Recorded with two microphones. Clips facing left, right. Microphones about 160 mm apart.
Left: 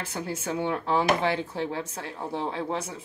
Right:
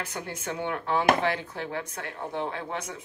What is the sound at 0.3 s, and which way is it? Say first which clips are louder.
Speech: left 4 dB; 30° left (ahead or behind).